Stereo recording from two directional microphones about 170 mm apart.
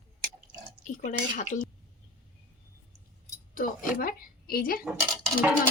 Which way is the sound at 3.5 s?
55° left (ahead or behind).